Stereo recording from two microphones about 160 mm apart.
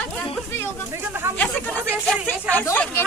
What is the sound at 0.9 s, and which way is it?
Speech, 15° right (ahead or behind).